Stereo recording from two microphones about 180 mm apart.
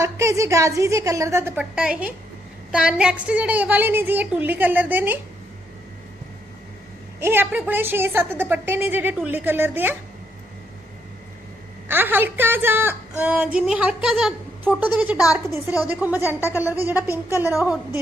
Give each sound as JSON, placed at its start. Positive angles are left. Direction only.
{"t": 0.0, "sound": "a woman's voice", "side_deg": -15}
{"t": 7.2, "sound": "a woman's voice", "side_deg": -10}
{"t": 11.9, "sound": "a woman's voice", "side_deg": -10}